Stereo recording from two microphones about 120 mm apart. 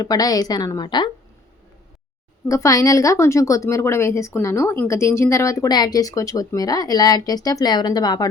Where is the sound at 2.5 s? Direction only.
25° left (ahead or behind).